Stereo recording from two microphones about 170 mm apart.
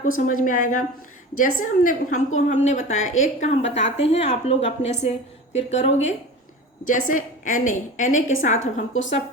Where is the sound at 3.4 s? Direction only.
40° left (ahead or behind).